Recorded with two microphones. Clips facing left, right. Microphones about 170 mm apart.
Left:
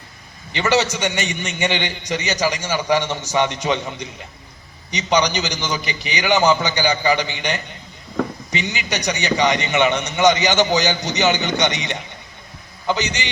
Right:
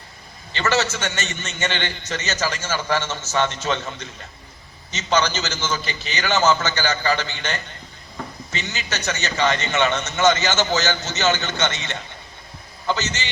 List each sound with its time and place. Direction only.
0.5 s a man's voice: 15° left (ahead or behind)